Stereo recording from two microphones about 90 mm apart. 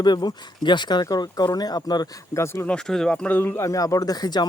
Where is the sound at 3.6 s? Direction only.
40° left (ahead or behind).